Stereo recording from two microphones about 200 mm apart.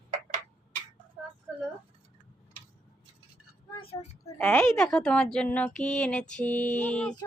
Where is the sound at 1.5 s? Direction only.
5° right (ahead or behind).